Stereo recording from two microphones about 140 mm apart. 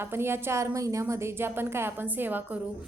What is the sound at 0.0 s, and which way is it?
A woman's voice, 15° right (ahead or behind).